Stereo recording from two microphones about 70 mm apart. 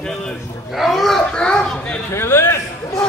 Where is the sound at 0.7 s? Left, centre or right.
Centre.